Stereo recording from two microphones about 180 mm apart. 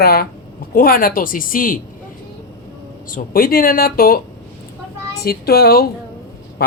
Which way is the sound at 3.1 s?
55° left (ahead or behind).